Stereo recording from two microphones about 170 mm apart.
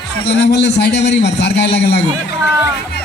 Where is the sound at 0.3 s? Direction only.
90° left.